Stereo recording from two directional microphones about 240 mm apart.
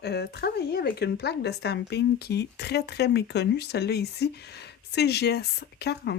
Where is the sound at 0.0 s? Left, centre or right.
Left.